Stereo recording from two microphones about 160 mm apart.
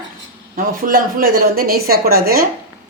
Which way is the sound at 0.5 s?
65° right (ahead or behind).